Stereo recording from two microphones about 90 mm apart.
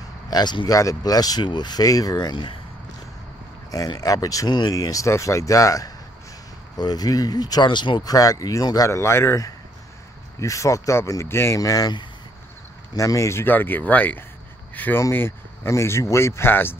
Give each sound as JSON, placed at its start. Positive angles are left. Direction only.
{"t": 0.3, "sound": "speech", "side_deg": 55}
{"t": 0.7, "sound": "speech", "side_deg": 40}
{"t": 3.7, "sound": "speech", "side_deg": 45}
{"t": 4.5, "sound": "speech", "side_deg": 55}
{"t": 4.7, "sound": "speech", "side_deg": 40}
{"t": 8.0, "sound": "speech", "side_deg": 40}
{"t": 10.4, "sound": "speech", "side_deg": 35}
{"t": 12.9, "sound": "speech", "side_deg": 35}
{"t": 14.7, "sound": "a sound", "side_deg": 20}
{"t": 15.0, "sound": "speech", "side_deg": 30}